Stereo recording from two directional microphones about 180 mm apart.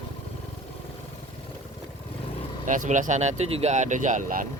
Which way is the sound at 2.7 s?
45° right (ahead or behind).